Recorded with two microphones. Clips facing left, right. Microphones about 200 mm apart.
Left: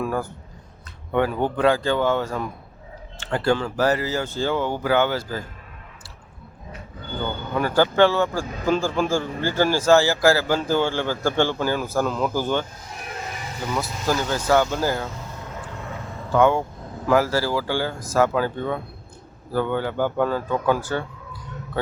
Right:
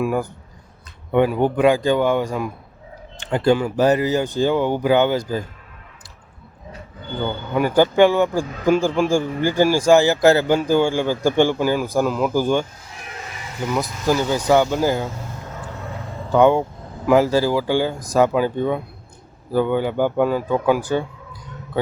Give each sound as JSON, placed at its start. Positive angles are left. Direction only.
{"t": 0.0, "sound": "a sound", "side_deg": -15}
{"t": 1.1, "sound": "a man's voice", "side_deg": -15}
{"t": 7.5, "sound": "a man's voice", "side_deg": -15}
{"t": 13.7, "sound": "a man's voice", "side_deg": -15}
{"t": 16.3, "sound": "a man's voice", "side_deg": -20}